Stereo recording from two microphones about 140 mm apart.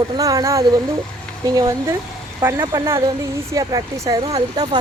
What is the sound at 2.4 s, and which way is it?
Speech, 20° right (ahead or behind).